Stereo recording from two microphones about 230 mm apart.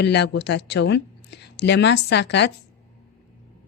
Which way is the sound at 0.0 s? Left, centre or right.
Left.